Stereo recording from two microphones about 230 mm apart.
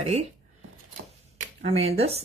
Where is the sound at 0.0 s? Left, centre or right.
Right.